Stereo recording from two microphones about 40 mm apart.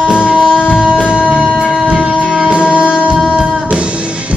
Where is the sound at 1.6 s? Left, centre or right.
Centre.